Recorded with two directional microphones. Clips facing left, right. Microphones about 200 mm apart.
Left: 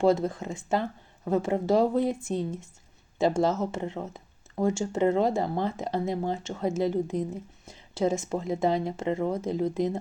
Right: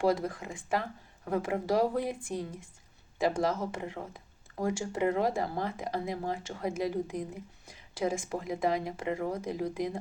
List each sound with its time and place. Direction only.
0.0 s speech: 25° left (ahead or behind)